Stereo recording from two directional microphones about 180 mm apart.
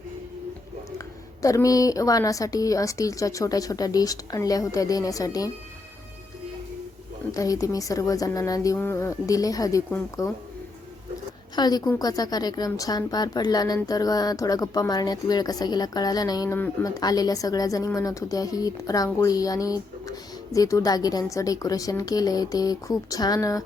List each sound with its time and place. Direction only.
0.9 s a woman's voice: 20° left (ahead or behind)
7.3 s a woman's voice: 20° left (ahead or behind)
11.5 s a woman's voice: 20° left (ahead or behind)